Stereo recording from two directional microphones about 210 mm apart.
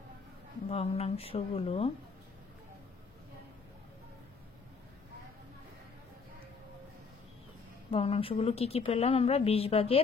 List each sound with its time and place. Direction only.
0.7 s a woman's voice: 30° left (ahead or behind)
7.9 s a woman's voice: 25° left (ahead or behind)